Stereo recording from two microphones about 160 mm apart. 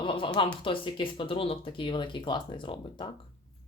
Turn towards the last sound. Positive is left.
turn(degrees=30)  # may be behind; listen again after turning